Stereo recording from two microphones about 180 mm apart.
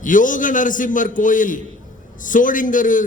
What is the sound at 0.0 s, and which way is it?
A man's voice, 45° left (ahead or behind).